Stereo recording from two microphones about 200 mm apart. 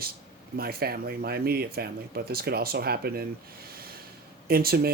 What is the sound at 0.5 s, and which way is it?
Speech, 50° right (ahead or behind).